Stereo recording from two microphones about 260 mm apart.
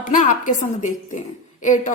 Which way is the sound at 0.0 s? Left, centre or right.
Left.